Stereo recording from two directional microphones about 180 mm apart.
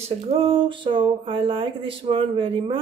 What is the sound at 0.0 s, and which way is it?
Speech, 30° right (ahead or behind).